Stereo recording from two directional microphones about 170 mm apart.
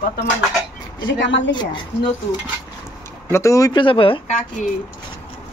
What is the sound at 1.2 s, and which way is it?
Speech, 90° left.